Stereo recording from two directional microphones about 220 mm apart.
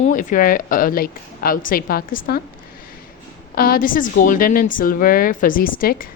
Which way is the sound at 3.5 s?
40° left (ahead or behind).